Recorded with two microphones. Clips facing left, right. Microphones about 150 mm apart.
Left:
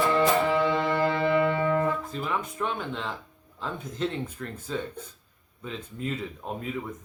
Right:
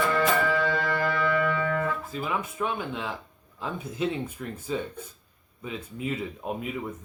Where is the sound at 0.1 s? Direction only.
25° left (ahead or behind).